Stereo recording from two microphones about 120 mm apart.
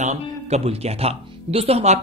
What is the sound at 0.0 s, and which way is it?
Speech, 70° right (ahead or behind).